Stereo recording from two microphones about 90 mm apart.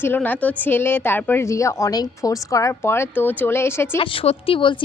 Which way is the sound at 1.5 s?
35° left (ahead or behind).